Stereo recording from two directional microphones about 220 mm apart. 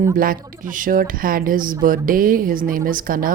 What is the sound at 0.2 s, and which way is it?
A woman's voice, 40° right (ahead or behind).